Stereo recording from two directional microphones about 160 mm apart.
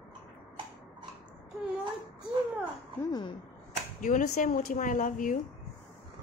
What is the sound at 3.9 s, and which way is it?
Speech, 55° left (ahead or behind).